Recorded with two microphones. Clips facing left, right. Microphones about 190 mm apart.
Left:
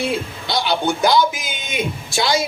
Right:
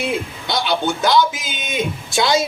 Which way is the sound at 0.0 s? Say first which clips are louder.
Even; 20° right (ahead or behind).